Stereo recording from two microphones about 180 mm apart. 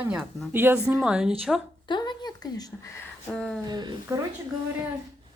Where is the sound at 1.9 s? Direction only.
25° left (ahead or behind).